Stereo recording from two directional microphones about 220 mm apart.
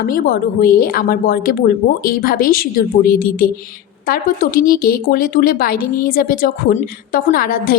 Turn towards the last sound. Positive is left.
turn(degrees=40)  # may be behind; listen again after turning